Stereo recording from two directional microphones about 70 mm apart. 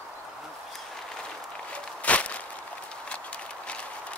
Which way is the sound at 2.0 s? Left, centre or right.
Centre.